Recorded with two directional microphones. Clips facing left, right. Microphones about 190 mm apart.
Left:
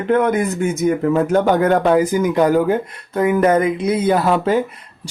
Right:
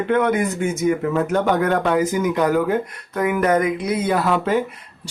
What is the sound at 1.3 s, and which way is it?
Speech, 35° left (ahead or behind).